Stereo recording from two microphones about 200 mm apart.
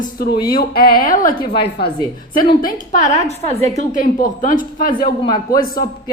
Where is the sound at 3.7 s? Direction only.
40° left (ahead or behind).